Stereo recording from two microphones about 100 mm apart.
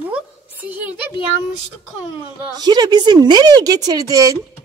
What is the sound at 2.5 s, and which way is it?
Speech, 45° right (ahead or behind).